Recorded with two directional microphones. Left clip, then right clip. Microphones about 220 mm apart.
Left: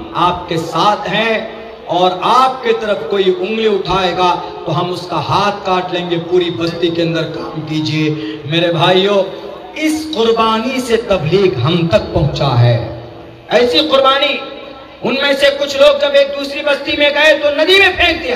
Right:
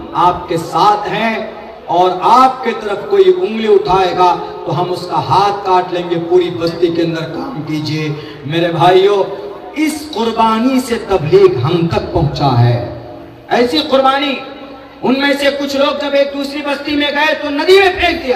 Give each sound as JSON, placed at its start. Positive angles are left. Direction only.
{"t": 0.2, "sound": "a man's voice", "side_deg": 35}